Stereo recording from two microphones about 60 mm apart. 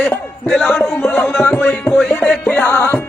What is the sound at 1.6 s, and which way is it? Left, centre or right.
Music, left.